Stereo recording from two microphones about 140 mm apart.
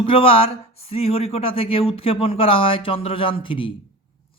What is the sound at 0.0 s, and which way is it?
Speech, 40° left (ahead or behind).